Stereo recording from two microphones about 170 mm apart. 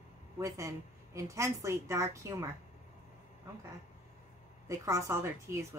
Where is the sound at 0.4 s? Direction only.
20° right (ahead or behind).